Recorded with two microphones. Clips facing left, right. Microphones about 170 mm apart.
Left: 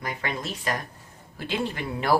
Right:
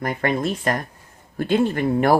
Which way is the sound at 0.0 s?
55° right (ahead or behind).